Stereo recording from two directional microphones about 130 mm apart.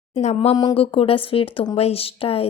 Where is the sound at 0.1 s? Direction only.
60° left (ahead or behind).